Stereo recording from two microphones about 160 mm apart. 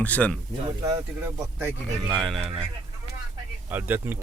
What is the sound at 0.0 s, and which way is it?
Speech, 10° left (ahead or behind).